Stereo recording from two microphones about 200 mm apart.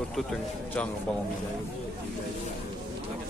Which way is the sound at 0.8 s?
5° left (ahead or behind).